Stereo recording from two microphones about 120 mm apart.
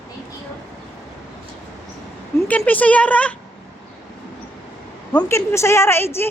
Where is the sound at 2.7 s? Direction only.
10° left (ahead or behind).